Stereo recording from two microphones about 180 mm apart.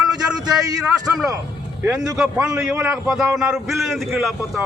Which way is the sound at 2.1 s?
5° right (ahead or behind).